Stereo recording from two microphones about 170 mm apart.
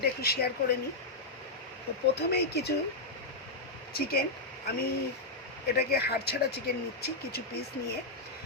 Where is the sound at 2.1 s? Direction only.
75° left (ahead or behind).